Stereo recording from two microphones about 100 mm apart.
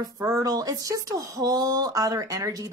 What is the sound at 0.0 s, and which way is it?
Speech, 35° right (ahead or behind).